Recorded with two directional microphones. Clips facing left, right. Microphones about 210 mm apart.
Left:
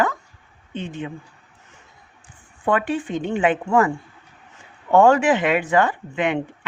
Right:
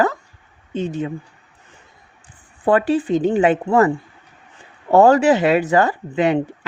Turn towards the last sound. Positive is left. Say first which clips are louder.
# right 5 dB
turn(degrees=-40)  # may be behind; listen again after turning